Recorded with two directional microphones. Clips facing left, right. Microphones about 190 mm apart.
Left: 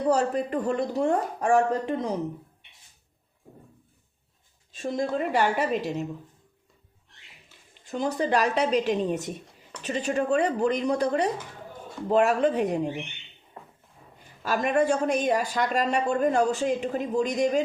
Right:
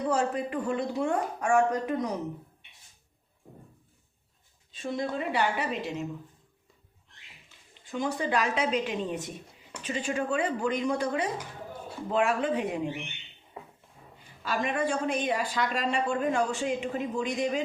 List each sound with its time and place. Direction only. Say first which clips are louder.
0.1 s speech: left 6 dB; 40° left (ahead or behind)
4.7 s a woman's voice: left 4 dB; 45° left (ahead or behind)
7.9 s speech: left 4 dB; 40° left (ahead or behind)
14.4 s a woman's voice: left 6 dB; 45° left (ahead or behind)